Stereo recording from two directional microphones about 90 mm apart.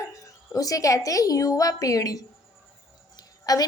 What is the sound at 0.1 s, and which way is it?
A woman's voice, 40° left (ahead or behind).